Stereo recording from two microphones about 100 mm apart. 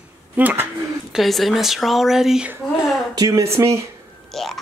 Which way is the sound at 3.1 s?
35° right (ahead or behind).